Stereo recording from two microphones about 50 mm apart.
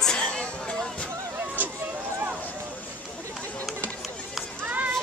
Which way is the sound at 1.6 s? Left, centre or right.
Right.